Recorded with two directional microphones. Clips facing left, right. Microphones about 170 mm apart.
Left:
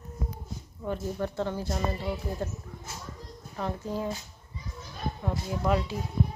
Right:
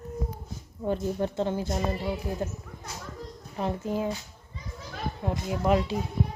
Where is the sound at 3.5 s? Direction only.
20° right (ahead or behind).